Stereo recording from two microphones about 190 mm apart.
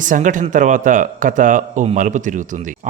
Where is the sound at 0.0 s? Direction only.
45° right (ahead or behind).